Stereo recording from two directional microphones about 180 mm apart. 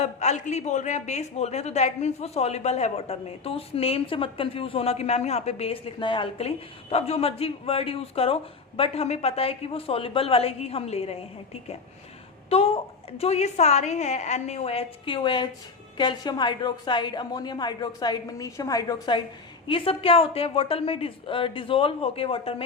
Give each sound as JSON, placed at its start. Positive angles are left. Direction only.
{"t": 0.0, "sound": "a man's voice", "side_deg": 40}
{"t": 12.5, "sound": "a man's voice", "side_deg": 30}